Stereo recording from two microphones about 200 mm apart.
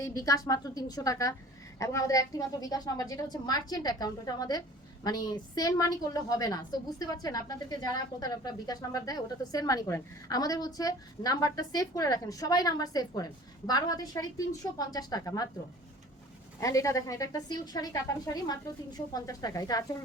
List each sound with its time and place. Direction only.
0.1 s a woman's voice: 15° left (ahead or behind)
16.6 s a woman's voice: 15° left (ahead or behind)